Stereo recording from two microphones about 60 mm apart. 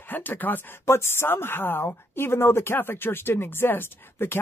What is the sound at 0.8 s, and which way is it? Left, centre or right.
Speech, left.